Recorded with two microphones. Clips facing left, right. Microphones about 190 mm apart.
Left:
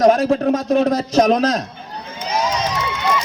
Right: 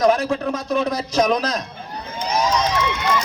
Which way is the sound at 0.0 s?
40° left (ahead or behind).